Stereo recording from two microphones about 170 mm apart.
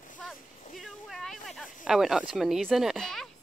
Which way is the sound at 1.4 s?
Centre (ahead or behind).